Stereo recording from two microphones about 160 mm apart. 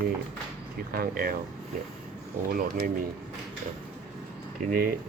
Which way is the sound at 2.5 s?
60° right (ahead or behind).